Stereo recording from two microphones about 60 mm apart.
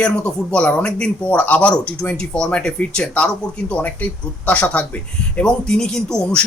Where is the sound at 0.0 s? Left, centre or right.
Centre.